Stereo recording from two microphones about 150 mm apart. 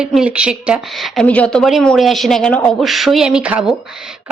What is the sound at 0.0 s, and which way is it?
A woman's voice, 5° right (ahead or behind).